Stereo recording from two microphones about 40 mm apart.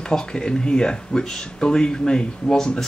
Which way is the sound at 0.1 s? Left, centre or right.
Centre.